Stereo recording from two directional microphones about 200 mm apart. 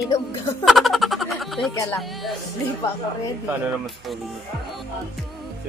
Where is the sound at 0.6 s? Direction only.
Centre (ahead or behind).